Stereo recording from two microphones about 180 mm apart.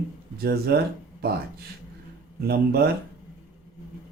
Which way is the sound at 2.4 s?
60° right (ahead or behind).